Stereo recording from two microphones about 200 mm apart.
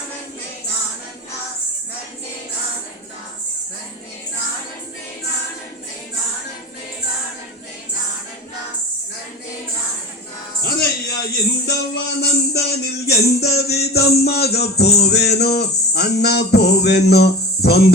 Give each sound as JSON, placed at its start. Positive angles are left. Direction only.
{"t": 10.6, "sound": "speech", "side_deg": 50}
{"t": 13.6, "sound": "music", "side_deg": 55}